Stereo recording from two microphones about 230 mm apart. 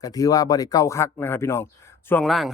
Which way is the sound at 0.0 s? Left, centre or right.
Centre.